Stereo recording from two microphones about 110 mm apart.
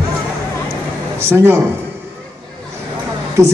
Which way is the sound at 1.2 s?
20° right (ahead or behind).